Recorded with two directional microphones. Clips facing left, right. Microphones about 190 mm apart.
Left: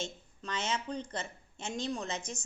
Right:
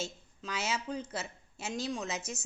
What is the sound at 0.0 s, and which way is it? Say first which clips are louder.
A woman's voice: even; 5° right (ahead or behind).